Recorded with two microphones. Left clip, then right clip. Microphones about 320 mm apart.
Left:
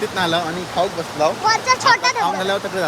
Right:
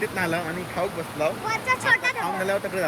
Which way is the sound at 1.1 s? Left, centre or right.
Centre.